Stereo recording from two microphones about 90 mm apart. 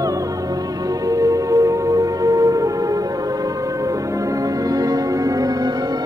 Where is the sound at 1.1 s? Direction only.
40° right (ahead or behind).